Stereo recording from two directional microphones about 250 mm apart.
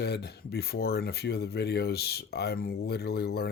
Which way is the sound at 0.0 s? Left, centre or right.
Left.